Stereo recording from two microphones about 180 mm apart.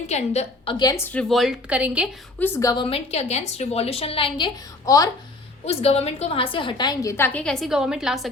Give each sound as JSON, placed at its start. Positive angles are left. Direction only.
{"t": 0.1, "sound": "a woman's voice", "side_deg": 35}
{"t": 2.4, "sound": "a woman's voice", "side_deg": 15}
{"t": 5.6, "sound": "a woman's voice", "side_deg": 35}